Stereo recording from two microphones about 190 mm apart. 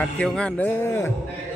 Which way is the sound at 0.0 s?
5° left (ahead or behind).